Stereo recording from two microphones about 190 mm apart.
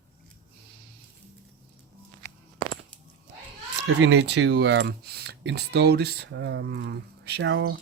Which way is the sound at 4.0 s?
65° right (ahead or behind).